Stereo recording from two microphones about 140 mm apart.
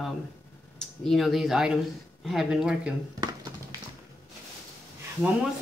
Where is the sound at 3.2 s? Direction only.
25° right (ahead or behind).